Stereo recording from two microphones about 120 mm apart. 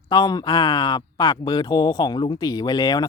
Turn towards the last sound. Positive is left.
turn(degrees=35)  # may be behind; listen again after turning